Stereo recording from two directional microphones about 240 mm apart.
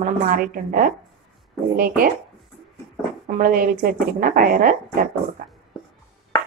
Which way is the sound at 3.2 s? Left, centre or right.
Right.